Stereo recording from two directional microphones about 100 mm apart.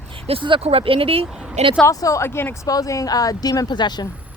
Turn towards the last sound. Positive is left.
turn(degrees=45)  # may be behind; listen again after turning